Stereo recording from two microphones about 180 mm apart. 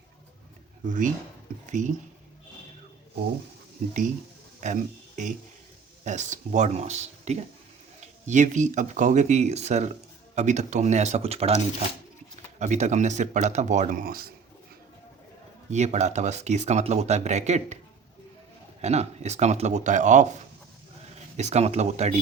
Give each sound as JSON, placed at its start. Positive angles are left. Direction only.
{"t": 0.9, "sound": "speech", "side_deg": -45}
{"t": 4.6, "sound": "speech", "side_deg": -45}
{"t": 12.5, "sound": "speech", "side_deg": -40}
{"t": 15.7, "sound": "speech", "side_deg": -40}
{"t": 18.8, "sound": "speech", "side_deg": -40}
{"t": 21.3, "sound": "speech", "side_deg": -40}